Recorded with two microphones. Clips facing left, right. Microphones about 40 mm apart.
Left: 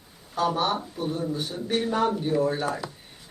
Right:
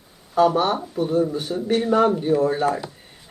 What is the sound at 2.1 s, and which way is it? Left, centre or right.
Speech, centre.